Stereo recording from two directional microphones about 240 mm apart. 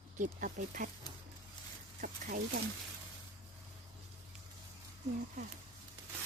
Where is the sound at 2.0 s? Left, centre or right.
Right.